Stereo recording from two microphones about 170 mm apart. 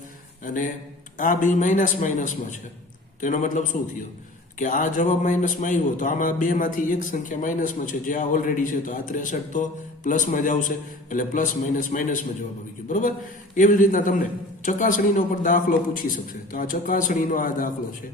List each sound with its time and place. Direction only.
0.4 s speech: 50° left (ahead or behind)
13.6 s speech: 50° left (ahead or behind)